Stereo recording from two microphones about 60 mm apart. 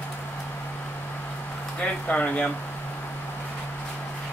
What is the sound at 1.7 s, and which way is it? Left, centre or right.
Speech, left.